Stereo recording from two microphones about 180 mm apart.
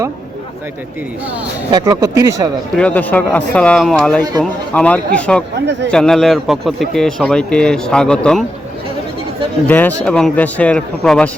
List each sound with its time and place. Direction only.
1.7 s speech: 20° right (ahead or behind)
2.7 s a man's voice: 10° left (ahead or behind)
4.2 s speech: 20° right (ahead or behind)
4.7 s a man's voice: 5° left (ahead or behind)
9.6 s speech: 10° left (ahead or behind)